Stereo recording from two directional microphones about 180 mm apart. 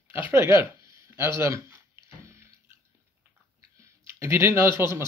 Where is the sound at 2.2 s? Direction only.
15° right (ahead or behind).